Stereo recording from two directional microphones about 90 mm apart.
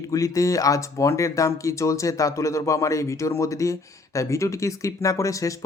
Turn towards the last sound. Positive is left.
turn(degrees=35)  # may be behind; listen again after turning